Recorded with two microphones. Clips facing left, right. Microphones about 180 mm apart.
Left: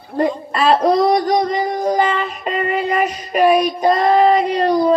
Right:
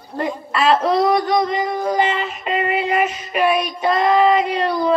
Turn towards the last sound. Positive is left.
turn(degrees=40)  # may be behind; listen again after turning